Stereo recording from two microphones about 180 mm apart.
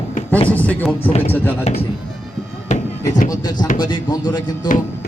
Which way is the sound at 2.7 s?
45° left (ahead or behind).